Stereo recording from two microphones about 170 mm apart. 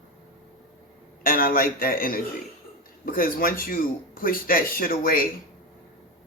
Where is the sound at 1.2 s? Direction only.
55° left (ahead or behind).